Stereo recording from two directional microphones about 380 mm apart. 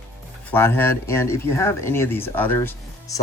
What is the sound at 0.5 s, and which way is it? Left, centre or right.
Speech, centre.